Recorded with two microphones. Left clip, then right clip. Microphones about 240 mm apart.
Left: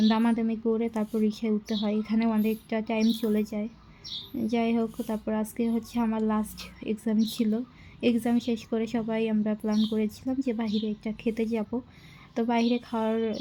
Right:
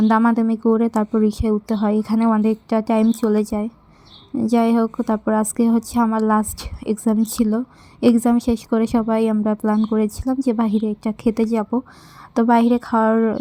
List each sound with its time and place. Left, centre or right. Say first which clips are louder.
0.1 s a woman's voice: right 10 dB; right